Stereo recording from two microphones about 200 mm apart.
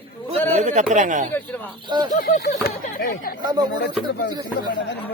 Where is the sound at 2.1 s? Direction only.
45° left (ahead or behind).